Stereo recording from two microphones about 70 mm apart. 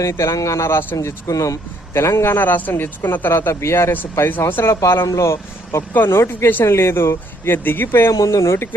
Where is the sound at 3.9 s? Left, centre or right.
Left.